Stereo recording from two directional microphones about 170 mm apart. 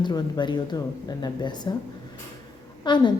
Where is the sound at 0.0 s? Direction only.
25° left (ahead or behind).